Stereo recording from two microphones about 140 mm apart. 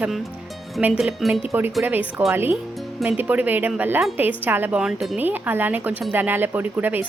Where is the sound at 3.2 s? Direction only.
10° right (ahead or behind).